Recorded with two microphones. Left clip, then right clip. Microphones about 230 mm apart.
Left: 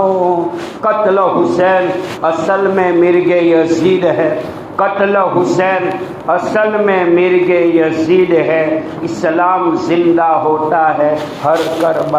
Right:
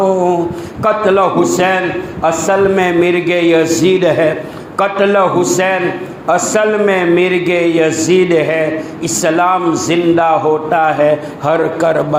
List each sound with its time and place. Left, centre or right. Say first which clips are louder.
1.0 s a man's voice: even; right